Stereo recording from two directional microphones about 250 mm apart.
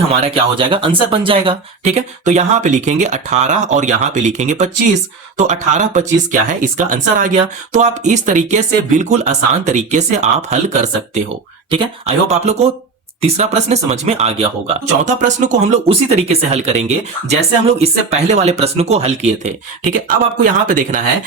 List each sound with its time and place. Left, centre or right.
0.1 s speech: right